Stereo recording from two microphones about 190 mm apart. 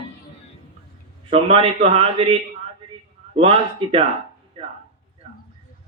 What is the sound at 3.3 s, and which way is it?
A man's voice, 30° right (ahead or behind).